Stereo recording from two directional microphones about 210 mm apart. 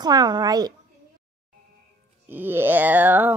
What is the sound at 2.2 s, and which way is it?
A child's voice, 10° right (ahead or behind).